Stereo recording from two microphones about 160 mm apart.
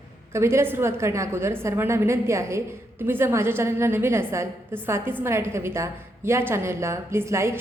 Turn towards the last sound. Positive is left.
turn(degrees=-15)  # may be behind; listen again after turning